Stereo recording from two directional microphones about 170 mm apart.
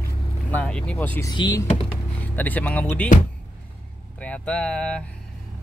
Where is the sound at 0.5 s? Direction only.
10° left (ahead or behind).